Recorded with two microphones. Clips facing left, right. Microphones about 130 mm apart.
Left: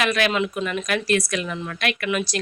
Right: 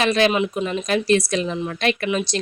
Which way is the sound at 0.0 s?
30° right (ahead or behind).